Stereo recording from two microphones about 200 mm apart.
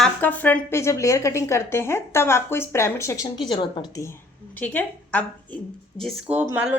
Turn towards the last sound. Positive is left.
turn(degrees=-10)  # may be behind; listen again after turning